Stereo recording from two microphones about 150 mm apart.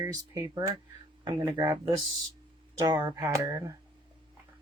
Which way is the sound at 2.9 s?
25° right (ahead or behind).